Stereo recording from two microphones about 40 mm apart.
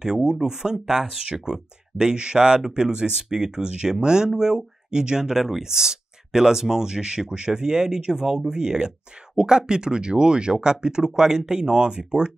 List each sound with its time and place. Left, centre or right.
0.0 s speech: centre